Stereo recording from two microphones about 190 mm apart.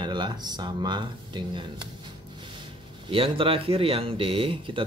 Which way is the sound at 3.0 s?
30° right (ahead or behind).